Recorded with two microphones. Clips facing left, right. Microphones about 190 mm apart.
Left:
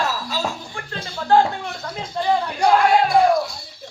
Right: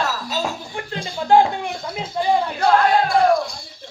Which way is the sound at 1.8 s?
10° right (ahead or behind).